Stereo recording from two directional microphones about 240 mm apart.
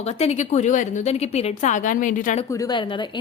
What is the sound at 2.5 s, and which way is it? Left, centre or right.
Speech, centre.